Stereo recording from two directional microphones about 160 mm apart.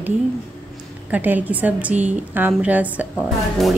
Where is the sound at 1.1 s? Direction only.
10° right (ahead or behind).